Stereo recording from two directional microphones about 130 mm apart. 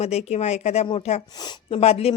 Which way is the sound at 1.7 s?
50° left (ahead or behind).